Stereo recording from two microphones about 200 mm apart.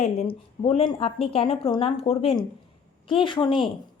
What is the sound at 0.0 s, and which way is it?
A woman's voice, 30° left (ahead or behind).